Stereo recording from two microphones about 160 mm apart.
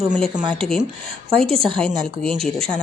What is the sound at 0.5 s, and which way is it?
Speech, 5° left (ahead or behind).